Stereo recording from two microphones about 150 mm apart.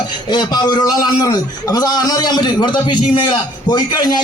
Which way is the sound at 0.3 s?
30° left (ahead or behind).